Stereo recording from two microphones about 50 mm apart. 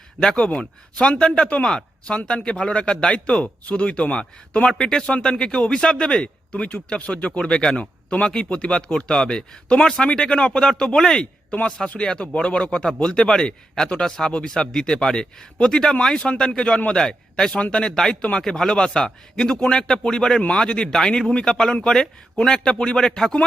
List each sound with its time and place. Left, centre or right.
0.2 s speech: centre
7.8 s speech: left
18.2 s speech: left
18.4 s speech: centre